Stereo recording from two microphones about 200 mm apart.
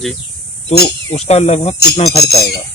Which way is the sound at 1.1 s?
35° left (ahead or behind).